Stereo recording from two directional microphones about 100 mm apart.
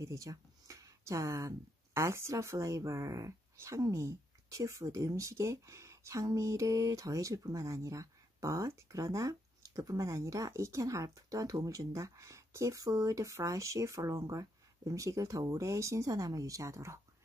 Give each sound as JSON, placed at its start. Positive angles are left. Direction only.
{"t": 0.0, "sound": "speech", "side_deg": -35}